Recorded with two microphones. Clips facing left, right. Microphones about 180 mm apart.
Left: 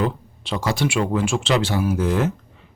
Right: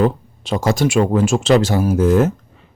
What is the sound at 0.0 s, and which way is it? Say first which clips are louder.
Speech: right 7 dB; 45° right (ahead or behind).